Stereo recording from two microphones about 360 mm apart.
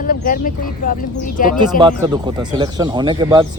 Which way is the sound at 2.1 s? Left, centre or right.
Centre.